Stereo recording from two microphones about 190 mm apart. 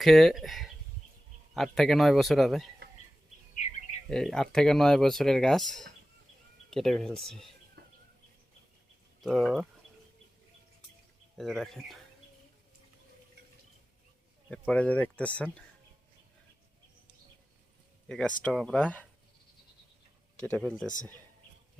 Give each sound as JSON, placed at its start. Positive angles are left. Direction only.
{"t": 0.0, "sound": "speech", "side_deg": 0}
{"t": 4.1, "sound": "speech", "side_deg": 0}
{"t": 7.8, "sound": "a sound", "side_deg": -55}
{"t": 9.2, "sound": "speech", "side_deg": 0}
{"t": 11.3, "sound": "speech", "side_deg": 0}
{"t": 14.7, "sound": "speech", "side_deg": 5}
{"t": 18.1, "sound": "speech", "side_deg": 5}
{"t": 20.3, "sound": "speech", "side_deg": 5}